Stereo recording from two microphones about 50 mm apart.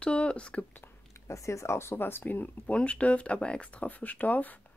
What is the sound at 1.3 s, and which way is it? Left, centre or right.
Speech, left.